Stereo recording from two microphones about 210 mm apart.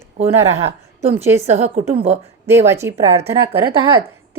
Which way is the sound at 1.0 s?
30° right (ahead or behind).